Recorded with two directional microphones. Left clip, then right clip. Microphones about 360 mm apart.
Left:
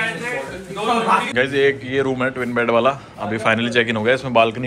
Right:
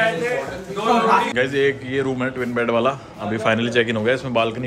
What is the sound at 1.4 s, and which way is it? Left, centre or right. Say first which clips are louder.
A man's voice: left 2 dB; centre.